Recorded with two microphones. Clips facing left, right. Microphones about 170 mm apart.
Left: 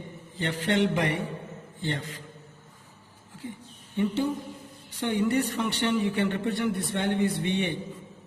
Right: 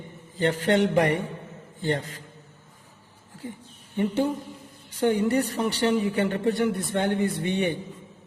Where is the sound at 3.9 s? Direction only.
50° right (ahead or behind).